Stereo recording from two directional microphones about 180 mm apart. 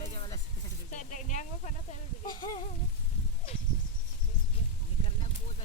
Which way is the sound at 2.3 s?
25° left (ahead or behind).